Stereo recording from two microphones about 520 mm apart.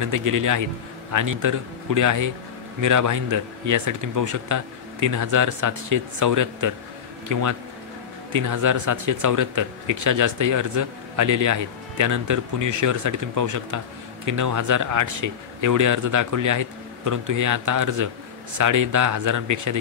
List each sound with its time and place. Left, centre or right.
0.0 s speech: right